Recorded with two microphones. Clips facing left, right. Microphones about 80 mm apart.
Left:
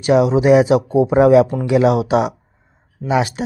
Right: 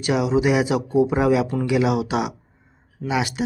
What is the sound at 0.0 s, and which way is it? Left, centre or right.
Speech, left.